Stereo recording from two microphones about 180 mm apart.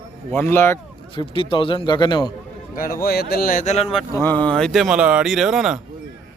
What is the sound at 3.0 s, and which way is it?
Speech, 60° left (ahead or behind).